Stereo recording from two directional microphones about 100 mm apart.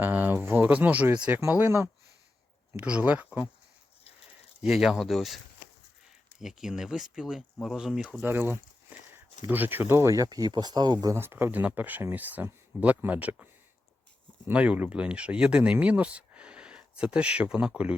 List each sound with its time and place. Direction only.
0.0 s speech: 20° right (ahead or behind)
2.8 s speech: 15° right (ahead or behind)
4.6 s speech: 5° right (ahead or behind)
6.4 s speech: 5° right (ahead or behind)
8.2 s speech: 20° right (ahead or behind); by 11.1 s 45° right (ahead or behind)
11.1 s speech: 25° right (ahead or behind)
14.4 s speech: 10° right (ahead or behind)